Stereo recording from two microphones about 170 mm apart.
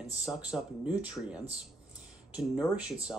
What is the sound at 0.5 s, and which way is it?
Speech, 15° left (ahead or behind).